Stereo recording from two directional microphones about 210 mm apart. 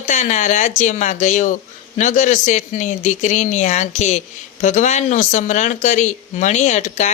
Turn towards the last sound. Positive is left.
turn(degrees=35)  # may be behind; listen again after turning